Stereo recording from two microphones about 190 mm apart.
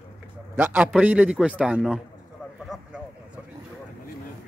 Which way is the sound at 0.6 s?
10° right (ahead or behind).